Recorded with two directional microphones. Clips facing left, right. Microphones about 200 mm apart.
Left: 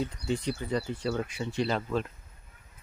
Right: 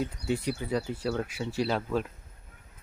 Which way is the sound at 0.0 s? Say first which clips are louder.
Right 1 dB; 5° right (ahead or behind).